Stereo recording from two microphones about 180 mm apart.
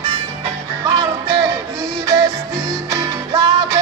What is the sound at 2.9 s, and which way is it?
Music, 15° right (ahead or behind).